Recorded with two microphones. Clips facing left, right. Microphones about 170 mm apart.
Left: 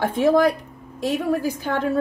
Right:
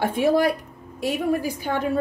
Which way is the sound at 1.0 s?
10° right (ahead or behind).